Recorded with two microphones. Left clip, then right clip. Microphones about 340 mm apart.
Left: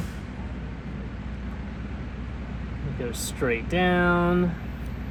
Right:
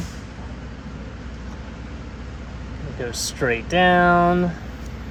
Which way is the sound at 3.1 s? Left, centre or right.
Right.